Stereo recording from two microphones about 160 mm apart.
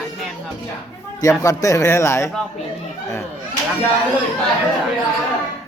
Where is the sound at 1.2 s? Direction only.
20° left (ahead or behind).